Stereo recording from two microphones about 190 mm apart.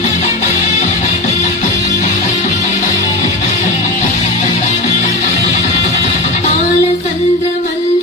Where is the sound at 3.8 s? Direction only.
40° left (ahead or behind).